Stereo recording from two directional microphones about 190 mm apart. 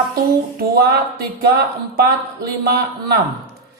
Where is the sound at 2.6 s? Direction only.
55° right (ahead or behind).